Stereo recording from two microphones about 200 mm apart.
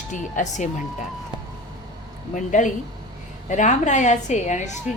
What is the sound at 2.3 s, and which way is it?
A woman's voice, 40° left (ahead or behind).